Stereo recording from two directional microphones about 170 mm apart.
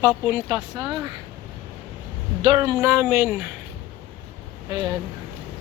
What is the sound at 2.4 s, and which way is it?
Speech, 25° right (ahead or behind).